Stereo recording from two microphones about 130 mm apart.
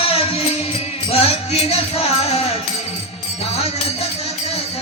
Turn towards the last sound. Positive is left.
turn(degrees=55)  # may be behind; listen again after turning